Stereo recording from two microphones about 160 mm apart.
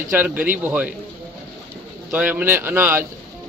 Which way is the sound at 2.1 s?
10° right (ahead or behind).